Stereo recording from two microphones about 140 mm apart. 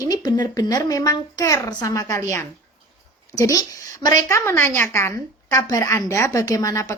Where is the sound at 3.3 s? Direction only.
25° left (ahead or behind).